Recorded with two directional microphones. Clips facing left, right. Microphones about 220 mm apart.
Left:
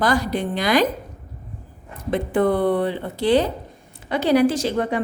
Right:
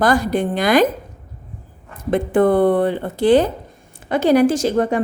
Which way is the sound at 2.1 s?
50° right (ahead or behind).